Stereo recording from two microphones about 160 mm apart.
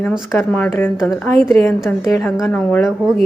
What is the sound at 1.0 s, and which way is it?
Speech, centre (ahead or behind).